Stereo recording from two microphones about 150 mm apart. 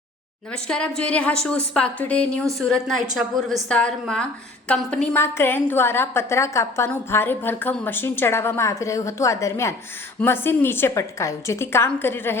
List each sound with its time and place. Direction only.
0.5 s a woman's voice: 5° left (ahead or behind)